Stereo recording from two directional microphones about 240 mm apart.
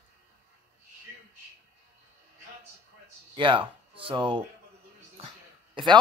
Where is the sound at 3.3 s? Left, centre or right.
Right.